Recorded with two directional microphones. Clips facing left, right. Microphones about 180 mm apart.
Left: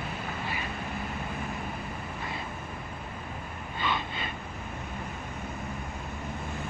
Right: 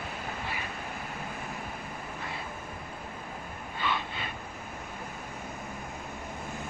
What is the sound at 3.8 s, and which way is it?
Gasp, centre (ahead or behind).